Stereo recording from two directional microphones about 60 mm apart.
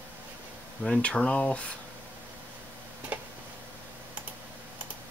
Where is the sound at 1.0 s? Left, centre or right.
Centre.